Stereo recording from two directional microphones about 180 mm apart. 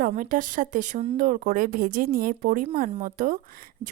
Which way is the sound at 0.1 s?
45° right (ahead or behind).